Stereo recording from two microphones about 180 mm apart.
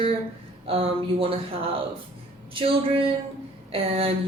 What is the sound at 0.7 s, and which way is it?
Speech, 30° right (ahead or behind).